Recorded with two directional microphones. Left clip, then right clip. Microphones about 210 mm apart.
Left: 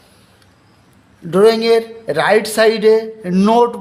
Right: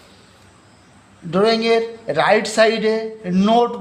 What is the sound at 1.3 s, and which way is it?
A man's voice, 20° left (ahead or behind).